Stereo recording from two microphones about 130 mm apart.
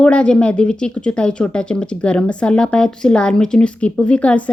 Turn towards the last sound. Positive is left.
turn(degrees=10)  # may be behind; listen again after turning